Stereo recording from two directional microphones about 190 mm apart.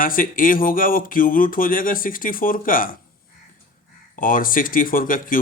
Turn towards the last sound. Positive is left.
turn(degrees=45)  # may be behind; listen again after turning